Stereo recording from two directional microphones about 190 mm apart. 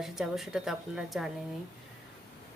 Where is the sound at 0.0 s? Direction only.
Centre (ahead or behind).